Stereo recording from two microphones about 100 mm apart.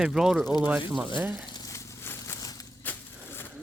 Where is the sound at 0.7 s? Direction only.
15° right (ahead or behind).